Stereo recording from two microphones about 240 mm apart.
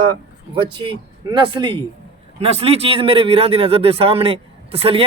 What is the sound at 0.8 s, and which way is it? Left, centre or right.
A man's voice, right.